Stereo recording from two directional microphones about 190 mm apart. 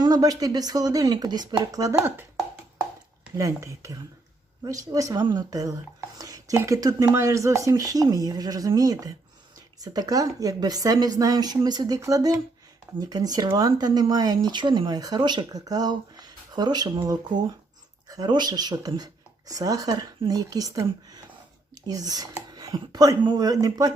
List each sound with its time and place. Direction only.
0.0 s speech: 20° right (ahead or behind)